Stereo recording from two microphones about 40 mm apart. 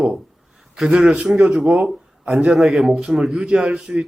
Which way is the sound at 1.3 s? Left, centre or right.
Right.